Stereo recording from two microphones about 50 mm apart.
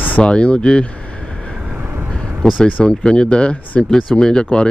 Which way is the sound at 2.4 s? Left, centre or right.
Centre.